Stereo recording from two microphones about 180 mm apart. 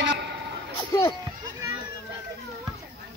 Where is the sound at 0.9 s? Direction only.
20° left (ahead or behind).